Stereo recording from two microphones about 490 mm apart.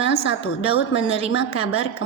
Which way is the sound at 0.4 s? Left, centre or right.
Centre.